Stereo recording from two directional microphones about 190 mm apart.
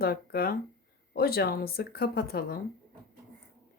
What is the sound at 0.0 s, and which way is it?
Speech, 55° left (ahead or behind).